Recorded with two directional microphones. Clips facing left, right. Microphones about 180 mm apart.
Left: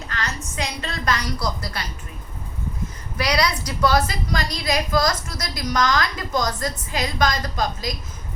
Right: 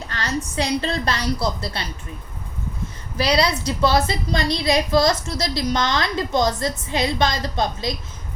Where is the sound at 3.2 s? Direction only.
30° right (ahead or behind).